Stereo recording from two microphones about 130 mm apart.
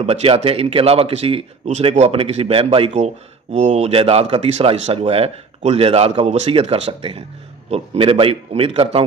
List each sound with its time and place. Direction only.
0.0 s speech: 50° right (ahead or behind)